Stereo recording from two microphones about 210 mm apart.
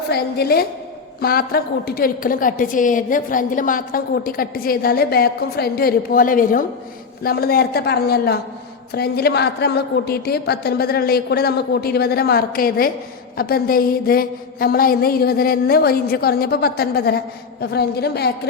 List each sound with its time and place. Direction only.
0.1 s a woman's voice: 50° left (ahead or behind)